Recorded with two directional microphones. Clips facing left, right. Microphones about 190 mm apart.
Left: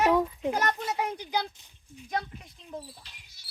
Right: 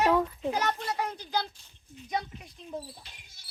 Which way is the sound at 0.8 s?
20° left (ahead or behind).